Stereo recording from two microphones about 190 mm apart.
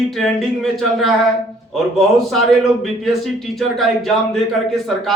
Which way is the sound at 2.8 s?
Centre (ahead or behind).